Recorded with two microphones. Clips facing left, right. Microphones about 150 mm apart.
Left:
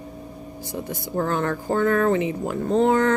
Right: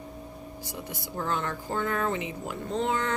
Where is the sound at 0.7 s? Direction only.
50° left (ahead or behind).